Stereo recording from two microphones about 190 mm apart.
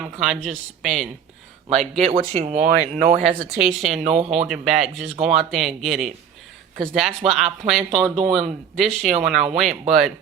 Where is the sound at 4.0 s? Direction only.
35° right (ahead or behind).